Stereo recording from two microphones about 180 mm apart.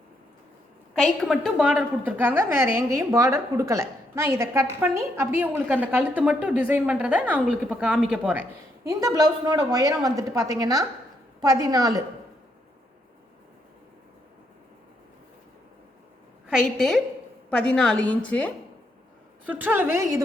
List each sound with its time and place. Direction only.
0.9 s a woman's voice: centre (ahead or behind)
8.9 s a woman's voice: 20° right (ahead or behind)
16.5 s a woman's voice: centre (ahead or behind)
19.5 s a woman's voice: 10° right (ahead or behind)